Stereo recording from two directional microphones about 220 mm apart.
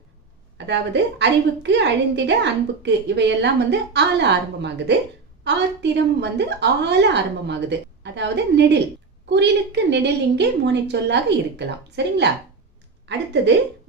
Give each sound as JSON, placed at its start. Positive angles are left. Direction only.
{"t": 0.6, "sound": "a woman's voice", "side_deg": -50}